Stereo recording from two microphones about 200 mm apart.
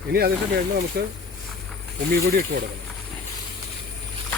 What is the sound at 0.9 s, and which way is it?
Speech, 55° right (ahead or behind).